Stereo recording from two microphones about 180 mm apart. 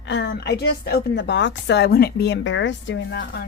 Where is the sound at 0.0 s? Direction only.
80° left.